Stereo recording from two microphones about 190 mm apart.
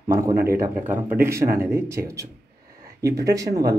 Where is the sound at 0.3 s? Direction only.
50° right (ahead or behind).